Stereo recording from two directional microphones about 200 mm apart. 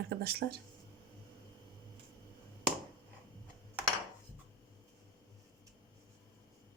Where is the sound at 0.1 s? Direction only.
50° right (ahead or behind).